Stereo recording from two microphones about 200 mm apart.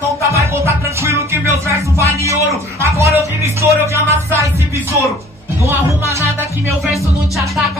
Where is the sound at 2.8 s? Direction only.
15° right (ahead or behind).